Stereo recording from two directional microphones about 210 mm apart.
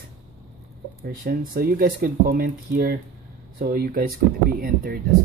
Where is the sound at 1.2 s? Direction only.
45° right (ahead or behind).